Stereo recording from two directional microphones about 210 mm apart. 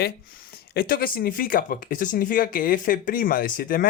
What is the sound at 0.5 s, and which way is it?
Speech, 50° left (ahead or behind).